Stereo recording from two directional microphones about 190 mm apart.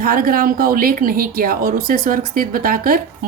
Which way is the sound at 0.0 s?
50° right (ahead or behind).